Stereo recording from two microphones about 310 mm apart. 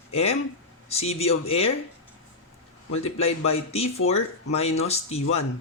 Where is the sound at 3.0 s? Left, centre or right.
Centre.